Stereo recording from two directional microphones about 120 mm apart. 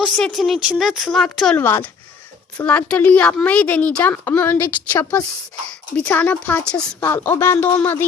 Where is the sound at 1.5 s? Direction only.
15° left (ahead or behind).